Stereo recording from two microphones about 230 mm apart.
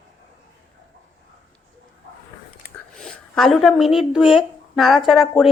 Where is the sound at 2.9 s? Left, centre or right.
Centre.